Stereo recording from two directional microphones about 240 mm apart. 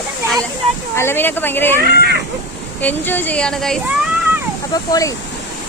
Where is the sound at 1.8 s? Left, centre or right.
Right.